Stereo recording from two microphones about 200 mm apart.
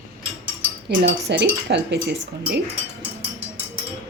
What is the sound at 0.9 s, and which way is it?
Speech, 50° right (ahead or behind).